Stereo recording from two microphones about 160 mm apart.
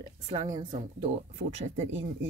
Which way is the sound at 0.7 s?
45° right (ahead or behind).